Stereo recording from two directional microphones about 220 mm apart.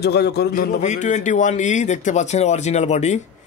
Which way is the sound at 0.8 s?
35° left (ahead or behind).